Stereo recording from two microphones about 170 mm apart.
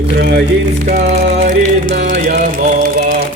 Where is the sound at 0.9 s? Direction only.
45° right (ahead or behind).